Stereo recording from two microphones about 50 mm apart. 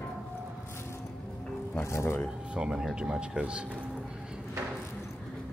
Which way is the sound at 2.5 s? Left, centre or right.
Centre.